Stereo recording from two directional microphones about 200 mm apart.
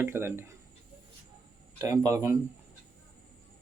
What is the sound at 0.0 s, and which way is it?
Speech, 10° right (ahead or behind).